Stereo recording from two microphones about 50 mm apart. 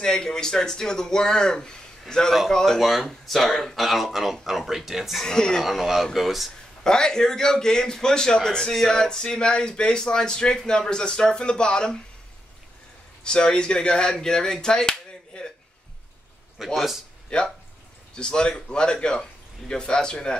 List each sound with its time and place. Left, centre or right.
0.0 s a man's voice: centre
5.2 s a man's voice: centre
5.6 s speech: centre
6.8 s a man's voice: centre
13.2 s speech: centre
16.5 s speech: centre
17.3 s a man's voice: centre